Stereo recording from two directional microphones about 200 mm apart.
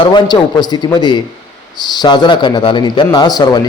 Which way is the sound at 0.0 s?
25° left (ahead or behind).